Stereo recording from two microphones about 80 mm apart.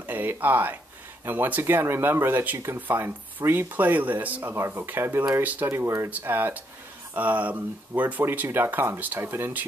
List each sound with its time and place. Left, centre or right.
0.0 s speech: right
5.8 s speech: right
6.0 s speech: right